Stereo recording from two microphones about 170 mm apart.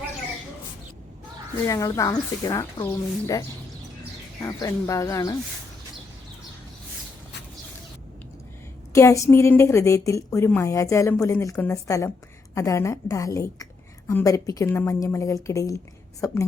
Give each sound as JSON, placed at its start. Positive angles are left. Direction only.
{"t": 1.6, "sound": "speech", "side_deg": 20}
{"t": 8.9, "sound": "a woman's voice", "side_deg": 20}